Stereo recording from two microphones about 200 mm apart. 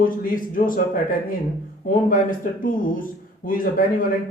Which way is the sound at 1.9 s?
45° left (ahead or behind).